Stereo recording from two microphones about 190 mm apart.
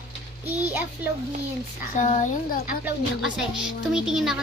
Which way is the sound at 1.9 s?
40° left (ahead or behind).